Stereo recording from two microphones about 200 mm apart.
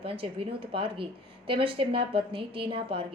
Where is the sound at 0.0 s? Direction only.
30° right (ahead or behind).